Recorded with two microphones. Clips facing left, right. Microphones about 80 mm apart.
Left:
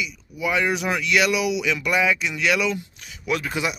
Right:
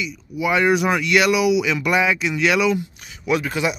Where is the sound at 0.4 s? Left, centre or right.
Centre.